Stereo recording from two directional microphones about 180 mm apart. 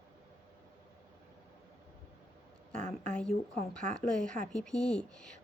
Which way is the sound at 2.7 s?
5° left (ahead or behind).